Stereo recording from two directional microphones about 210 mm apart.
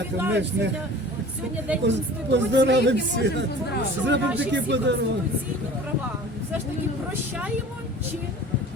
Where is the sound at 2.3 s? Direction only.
55° right (ahead or behind).